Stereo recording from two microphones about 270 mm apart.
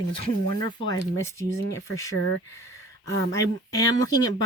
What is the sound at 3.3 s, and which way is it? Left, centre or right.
Speech, centre.